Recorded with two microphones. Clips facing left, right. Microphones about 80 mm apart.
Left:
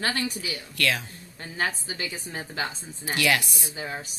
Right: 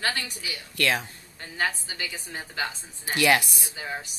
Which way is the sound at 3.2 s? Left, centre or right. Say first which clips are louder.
Right 3 dB; right.